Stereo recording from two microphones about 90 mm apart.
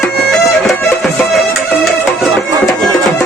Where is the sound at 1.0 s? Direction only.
Centre (ahead or behind).